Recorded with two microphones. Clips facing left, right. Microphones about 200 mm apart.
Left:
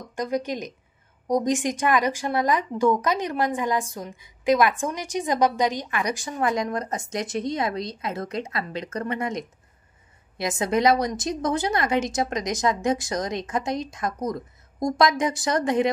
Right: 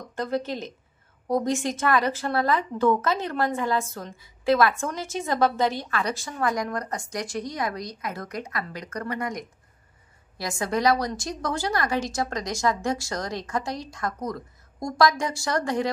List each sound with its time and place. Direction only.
0.1 s a woman's voice: 15° left (ahead or behind)